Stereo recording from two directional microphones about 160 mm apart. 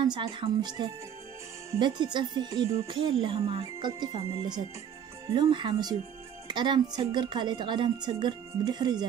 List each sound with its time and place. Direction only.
0.0 s speech: 30° right (ahead or behind)